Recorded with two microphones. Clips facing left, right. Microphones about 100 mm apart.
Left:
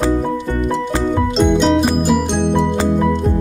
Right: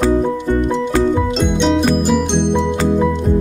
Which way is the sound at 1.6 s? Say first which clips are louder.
Even; 5° left (ahead or behind).